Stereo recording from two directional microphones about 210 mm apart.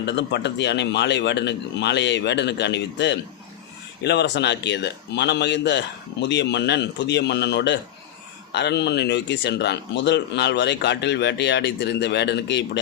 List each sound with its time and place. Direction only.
0.0 s speech: 55° left (ahead or behind)